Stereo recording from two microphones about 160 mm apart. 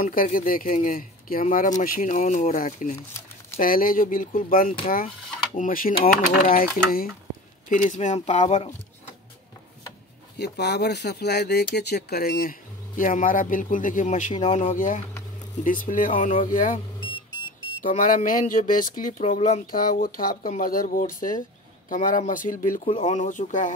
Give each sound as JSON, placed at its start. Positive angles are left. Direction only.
{"t": 0.0, "sound": "speech", "side_deg": 60}
{"t": 7.7, "sound": "speech", "side_deg": 50}
{"t": 10.4, "sound": "speech", "side_deg": 90}
{"t": 17.8, "sound": "speech", "side_deg": 55}
{"t": 19.6, "sound": "speech", "side_deg": 65}